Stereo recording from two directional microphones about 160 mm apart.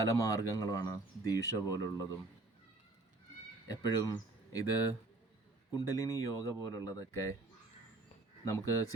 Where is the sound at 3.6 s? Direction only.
25° left (ahead or behind).